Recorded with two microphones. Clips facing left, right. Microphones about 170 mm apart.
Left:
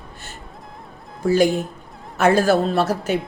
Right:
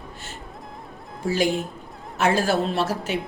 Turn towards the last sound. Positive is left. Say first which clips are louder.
# left 5 dB
turn(degrees=40)  # may be behind; listen again after turning